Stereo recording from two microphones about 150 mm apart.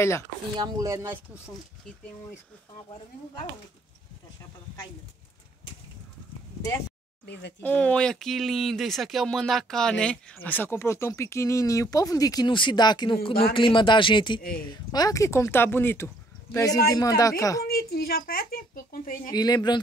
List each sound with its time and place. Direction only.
0.6 s speech: 25° right (ahead or behind)
7.6 s speech: 10° left (ahead or behind)
17.6 s a child's voice: 90° left
19.3 s speech: 25° left (ahead or behind)